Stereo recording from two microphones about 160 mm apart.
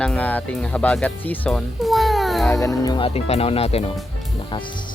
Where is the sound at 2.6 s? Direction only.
20° left (ahead or behind).